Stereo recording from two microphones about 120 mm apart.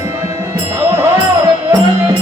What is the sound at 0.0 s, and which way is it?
Music, 20° right (ahead or behind).